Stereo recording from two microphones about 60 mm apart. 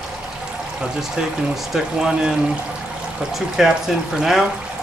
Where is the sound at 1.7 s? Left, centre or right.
Centre.